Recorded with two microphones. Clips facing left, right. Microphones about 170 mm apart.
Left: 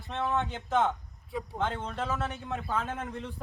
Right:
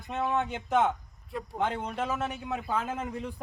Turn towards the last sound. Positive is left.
turn(degrees=-5)  # may be behind; listen again after turning